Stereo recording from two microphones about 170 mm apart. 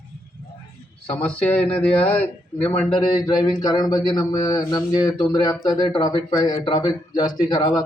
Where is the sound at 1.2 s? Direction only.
10° left (ahead or behind).